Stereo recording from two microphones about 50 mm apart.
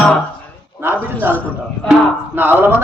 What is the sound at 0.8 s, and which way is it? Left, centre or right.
A man's voice, right.